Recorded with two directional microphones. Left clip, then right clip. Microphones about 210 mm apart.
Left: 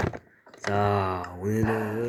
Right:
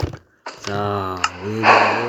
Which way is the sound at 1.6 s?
40° right (ahead or behind).